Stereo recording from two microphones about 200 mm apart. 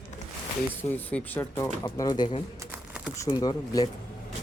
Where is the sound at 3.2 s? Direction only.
20° left (ahead or behind).